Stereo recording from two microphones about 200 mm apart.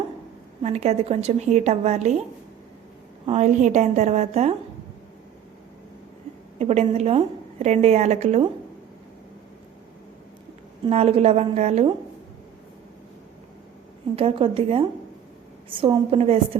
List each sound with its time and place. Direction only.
0.6 s a woman's voice: 30° right (ahead or behind)
3.2 s a woman's voice: 35° right (ahead or behind)
6.6 s a woman's voice: 35° right (ahead or behind)
10.8 s a woman's voice: 30° right (ahead or behind)
14.2 s a woman's voice: 30° right (ahead or behind)